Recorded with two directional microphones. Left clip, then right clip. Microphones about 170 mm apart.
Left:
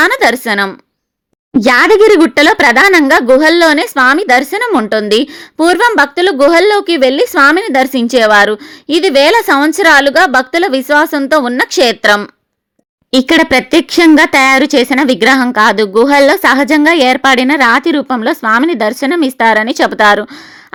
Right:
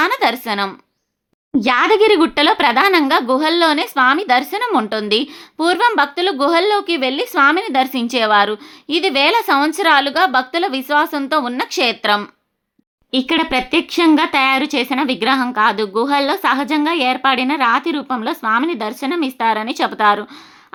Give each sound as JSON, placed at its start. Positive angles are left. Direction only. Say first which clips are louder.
{"t": 0.0, "sound": "a woman's voice", "louder": "left 7 dB", "side_deg": 35}